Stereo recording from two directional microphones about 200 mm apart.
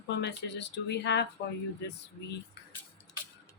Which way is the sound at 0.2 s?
60° left (ahead or behind).